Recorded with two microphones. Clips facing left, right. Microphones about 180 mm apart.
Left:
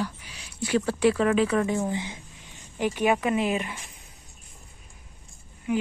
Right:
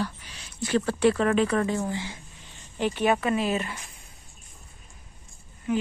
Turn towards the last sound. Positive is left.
turn(degrees=15)  # may be behind; listen again after turning